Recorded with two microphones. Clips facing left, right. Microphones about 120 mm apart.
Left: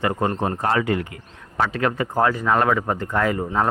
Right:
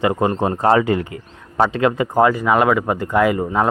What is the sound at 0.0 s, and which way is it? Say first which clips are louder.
Speech: right 4 dB; 15° right (ahead or behind).